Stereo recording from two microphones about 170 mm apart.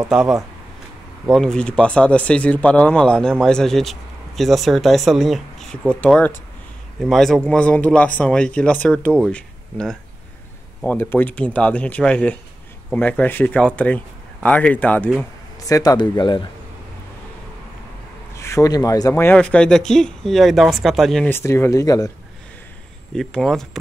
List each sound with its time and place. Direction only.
0.1 s speech: 5° right (ahead or behind)
15.6 s speech: 20° left (ahead or behind)
18.3 s speech: 15° left (ahead or behind); by 21.3 s centre (ahead or behind)
21.3 s speech: 15° left (ahead or behind)
23.1 s speech: centre (ahead or behind)